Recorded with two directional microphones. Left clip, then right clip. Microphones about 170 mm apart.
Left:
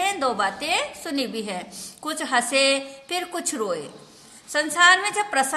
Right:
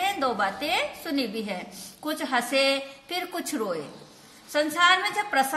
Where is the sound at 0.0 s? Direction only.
20° left (ahead or behind).